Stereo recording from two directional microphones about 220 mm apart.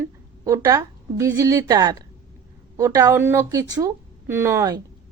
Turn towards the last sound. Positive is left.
turn(degrees=-15)  # may be behind; listen again after turning